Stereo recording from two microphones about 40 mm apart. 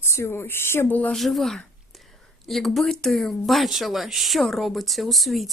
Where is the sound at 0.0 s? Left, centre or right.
Left.